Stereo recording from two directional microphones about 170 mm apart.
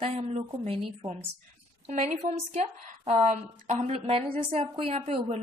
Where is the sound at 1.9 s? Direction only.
40° right (ahead or behind).